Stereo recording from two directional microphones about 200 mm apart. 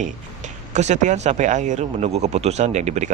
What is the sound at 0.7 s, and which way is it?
Speech, 35° right (ahead or behind).